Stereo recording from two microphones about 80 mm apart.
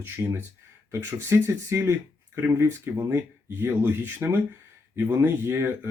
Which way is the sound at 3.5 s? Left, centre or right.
Right.